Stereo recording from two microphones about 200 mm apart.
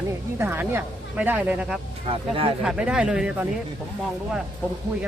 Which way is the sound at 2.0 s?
25° right (ahead or behind).